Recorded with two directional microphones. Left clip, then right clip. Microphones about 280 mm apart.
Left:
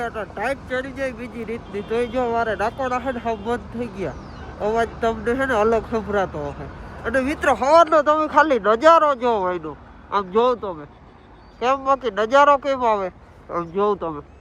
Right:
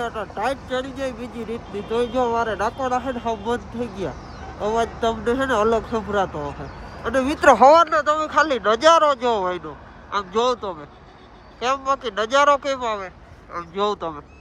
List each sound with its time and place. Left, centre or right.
0.0 s speech: centre
7.4 s speech: right
7.9 s speech: centre